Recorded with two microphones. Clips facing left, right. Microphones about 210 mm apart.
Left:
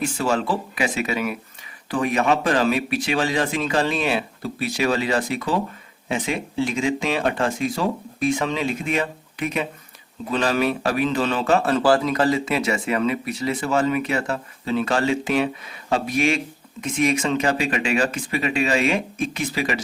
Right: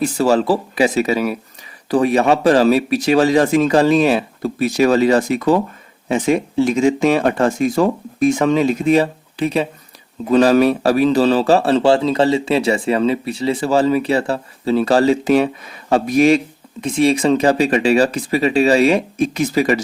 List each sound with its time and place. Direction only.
0.0 s speech: 40° right (ahead or behind)